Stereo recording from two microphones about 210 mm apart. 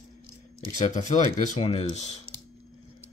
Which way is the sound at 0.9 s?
35° left (ahead or behind).